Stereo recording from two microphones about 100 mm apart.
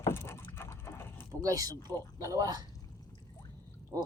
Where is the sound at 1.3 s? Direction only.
35° right (ahead or behind).